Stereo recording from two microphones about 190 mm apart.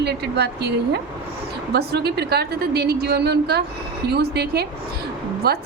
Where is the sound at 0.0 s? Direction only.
60° right (ahead or behind).